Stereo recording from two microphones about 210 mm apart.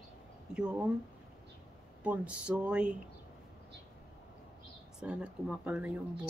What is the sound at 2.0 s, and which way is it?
Speech, 5° right (ahead or behind).